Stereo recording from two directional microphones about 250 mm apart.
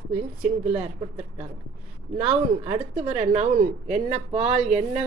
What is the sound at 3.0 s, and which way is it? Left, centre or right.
Speech, right.